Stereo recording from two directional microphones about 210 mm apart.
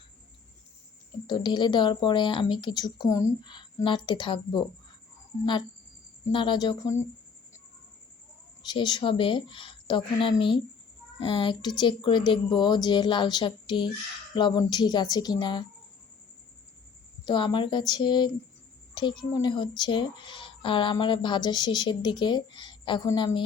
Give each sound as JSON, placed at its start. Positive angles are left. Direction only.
{"t": 1.3, "sound": "a woman's voice", "side_deg": 20}
{"t": 6.3, "sound": "a woman's voice", "side_deg": 20}
{"t": 8.6, "sound": "a woman's voice", "side_deg": 20}
{"t": 17.2, "sound": "a woman's voice", "side_deg": 20}